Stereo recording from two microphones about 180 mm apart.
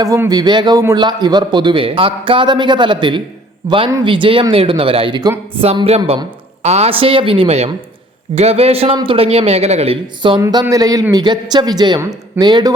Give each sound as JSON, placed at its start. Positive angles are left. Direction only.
{"t": 0.0, "sound": "a man's voice", "side_deg": -20}